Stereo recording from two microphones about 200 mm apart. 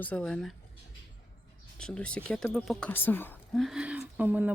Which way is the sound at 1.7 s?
5° left (ahead or behind).